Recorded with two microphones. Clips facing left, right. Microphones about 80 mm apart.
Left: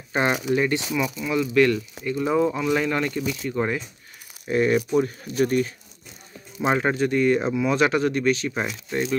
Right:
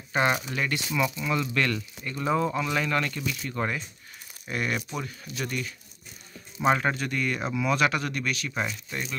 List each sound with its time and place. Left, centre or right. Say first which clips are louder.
0.1 s speech: left 4 dB; centre
1.2 s speech: left 7 dB; centre
4.5 s speech: left 9 dB; left
4.9 s speech: left 13 dB; left
6.6 s speech: left 3 dB; centre